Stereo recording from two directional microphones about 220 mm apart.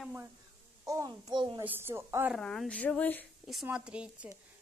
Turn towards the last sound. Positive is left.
turn(degrees=-5)  # may be behind; listen again after turning